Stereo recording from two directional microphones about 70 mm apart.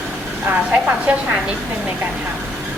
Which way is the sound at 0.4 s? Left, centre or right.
Right.